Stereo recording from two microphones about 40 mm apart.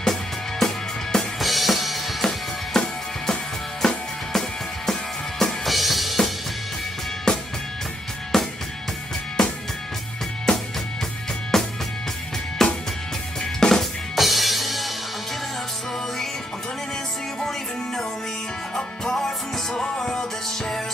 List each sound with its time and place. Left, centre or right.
0.0 s music: centre
1.4 s drum kit: centre
2.8 s music: centre
5.7 s drum kit: centre
7.3 s music: centre
11.5 s music: centre
14.1 s music: centre
17.4 s music: centre